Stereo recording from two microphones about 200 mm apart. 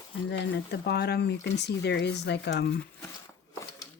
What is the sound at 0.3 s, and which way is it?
Speech, 60° left (ahead or behind).